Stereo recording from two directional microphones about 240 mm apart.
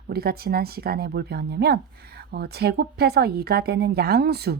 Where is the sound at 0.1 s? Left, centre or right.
Right.